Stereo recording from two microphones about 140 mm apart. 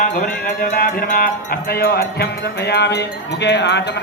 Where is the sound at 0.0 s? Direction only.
65° left (ahead or behind); by 2.0 s 90° left.